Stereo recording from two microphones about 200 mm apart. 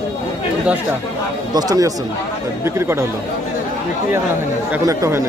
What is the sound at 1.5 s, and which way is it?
Speech, 20° right (ahead or behind).